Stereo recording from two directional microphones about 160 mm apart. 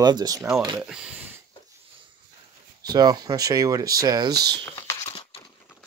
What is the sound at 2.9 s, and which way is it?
Speech, 25° right (ahead or behind).